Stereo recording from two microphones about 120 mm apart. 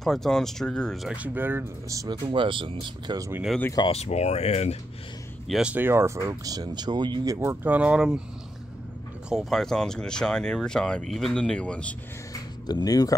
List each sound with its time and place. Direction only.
0.0 s speech: 5° left (ahead or behind)
1.1 s speech: 15° right (ahead or behind)
2.2 s speech: 45° right (ahead or behind)
3.2 s speech: 20° right (ahead or behind)
3.9 s speech: 65° left (ahead or behind)
5.5 s speech: 10° right (ahead or behind)
6.2 s speech: 30° right (ahead or behind)
7.3 s speech: 20° right (ahead or behind)
9.3 s speech: centre (ahead or behind)
12.6 s speech: 35° left (ahead or behind)